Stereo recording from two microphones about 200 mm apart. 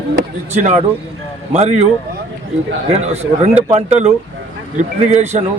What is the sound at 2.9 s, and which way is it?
Speech, 35° right (ahead or behind).